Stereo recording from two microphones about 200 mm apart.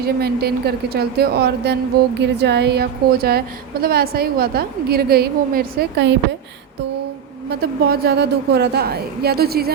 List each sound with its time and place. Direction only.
0.0 s a woman's voice: 50° right (ahead or behind)
7.6 s a woman's voice: 50° right (ahead or behind)